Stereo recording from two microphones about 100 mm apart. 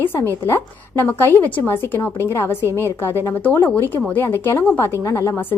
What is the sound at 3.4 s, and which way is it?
A woman's voice, 15° left (ahead or behind).